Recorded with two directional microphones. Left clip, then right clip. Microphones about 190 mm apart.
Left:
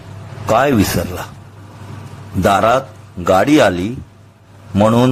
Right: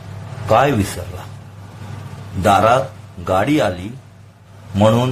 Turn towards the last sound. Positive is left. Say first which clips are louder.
# left 2 dB
turn(degrees=25)  # may be behind; listen again after turning